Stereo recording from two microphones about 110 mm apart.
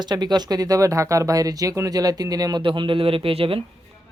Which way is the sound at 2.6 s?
50° right (ahead or behind).